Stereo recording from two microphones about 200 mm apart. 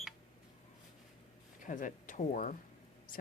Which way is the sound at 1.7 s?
40° left (ahead or behind).